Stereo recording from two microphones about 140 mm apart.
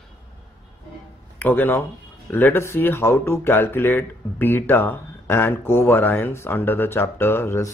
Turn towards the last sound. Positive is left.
turn(degrees=15)  # may be behind; listen again after turning